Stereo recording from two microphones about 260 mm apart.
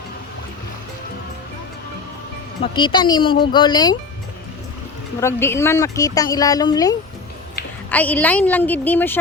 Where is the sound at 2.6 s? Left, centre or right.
Centre.